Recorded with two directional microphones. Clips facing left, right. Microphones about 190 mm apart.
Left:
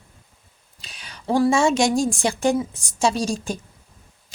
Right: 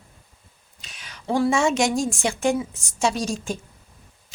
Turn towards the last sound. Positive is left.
turn(degrees=35)  # may be behind; listen again after turning